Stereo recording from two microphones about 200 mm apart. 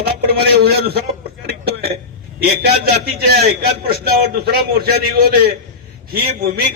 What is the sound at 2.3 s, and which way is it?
A man's voice, 50° right (ahead or behind).